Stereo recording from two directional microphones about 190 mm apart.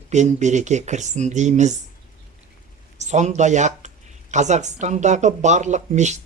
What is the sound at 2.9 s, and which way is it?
Speech, 40° right (ahead or behind).